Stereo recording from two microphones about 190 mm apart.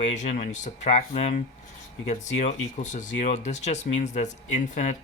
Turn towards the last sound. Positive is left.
turn(degrees=40)  # may be behind; listen again after turning